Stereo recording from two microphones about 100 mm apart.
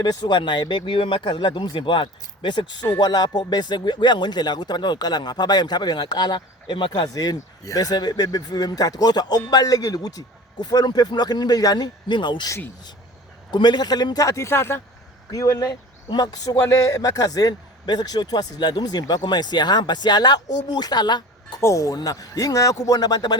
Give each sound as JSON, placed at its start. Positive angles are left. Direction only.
{"t": 0.0, "sound": "speech", "side_deg": 45}
{"t": 13.5, "sound": "a man's voice", "side_deg": 45}
{"t": 21.6, "sound": "a man's voice", "side_deg": 30}